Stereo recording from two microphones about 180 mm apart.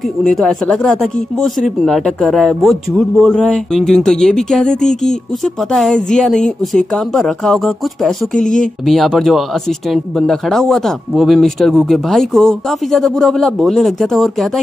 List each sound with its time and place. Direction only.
0.2 s speech: centre (ahead or behind)